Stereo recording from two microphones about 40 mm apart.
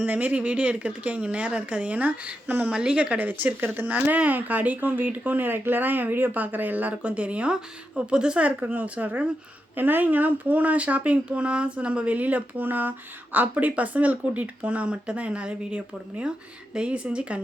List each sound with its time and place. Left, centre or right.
0.0 s speech: right
2.6 s speech: right
3.2 s speech: right
8.4 s speech: right
9.7 s speech: right
12.1 s speech: right
14.8 s speech: right